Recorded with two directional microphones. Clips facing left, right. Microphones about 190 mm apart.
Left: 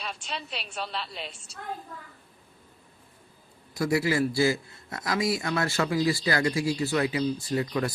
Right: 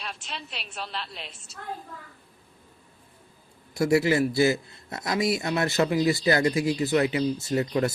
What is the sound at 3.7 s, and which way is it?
A man's voice, 25° right (ahead or behind).